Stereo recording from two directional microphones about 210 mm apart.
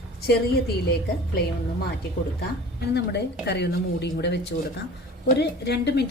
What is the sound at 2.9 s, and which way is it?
A woman's voice, 50° left (ahead or behind).